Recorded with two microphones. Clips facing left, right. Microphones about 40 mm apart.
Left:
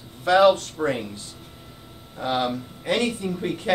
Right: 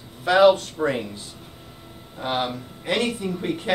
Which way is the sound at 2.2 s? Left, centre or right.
Centre.